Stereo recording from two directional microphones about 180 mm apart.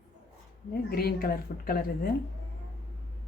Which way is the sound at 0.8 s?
60° left (ahead or behind).